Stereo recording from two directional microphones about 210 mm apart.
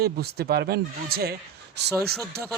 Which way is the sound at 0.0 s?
50° right (ahead or behind).